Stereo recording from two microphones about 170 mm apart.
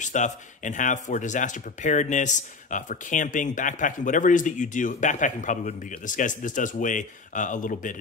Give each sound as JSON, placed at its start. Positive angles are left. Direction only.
{"t": 0.0, "sound": "speech", "side_deg": 45}